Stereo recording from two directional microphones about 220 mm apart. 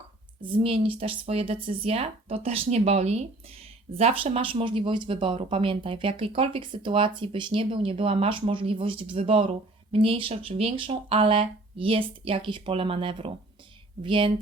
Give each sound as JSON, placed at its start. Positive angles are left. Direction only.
{"t": 0.4, "sound": "speech", "side_deg": -25}